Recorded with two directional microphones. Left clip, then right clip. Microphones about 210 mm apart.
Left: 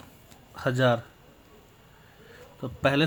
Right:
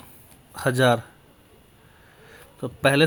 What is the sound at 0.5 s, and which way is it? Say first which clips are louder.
Speech: right 4 dB; 30° right (ahead or behind).